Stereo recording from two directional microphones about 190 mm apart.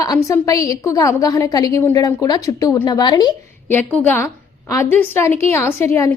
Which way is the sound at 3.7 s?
10° left (ahead or behind).